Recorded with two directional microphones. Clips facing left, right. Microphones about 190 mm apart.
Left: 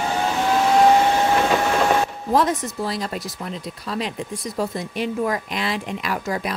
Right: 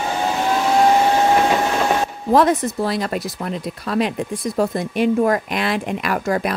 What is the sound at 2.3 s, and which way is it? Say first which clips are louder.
Speech: right 6 dB; 60° right (ahead or behind).